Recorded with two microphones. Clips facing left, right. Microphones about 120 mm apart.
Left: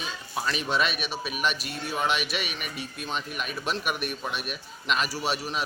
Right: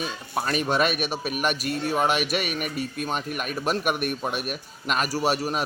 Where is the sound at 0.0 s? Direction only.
50° right (ahead or behind).